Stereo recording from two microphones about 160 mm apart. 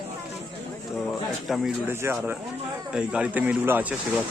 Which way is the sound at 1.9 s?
15° right (ahead or behind).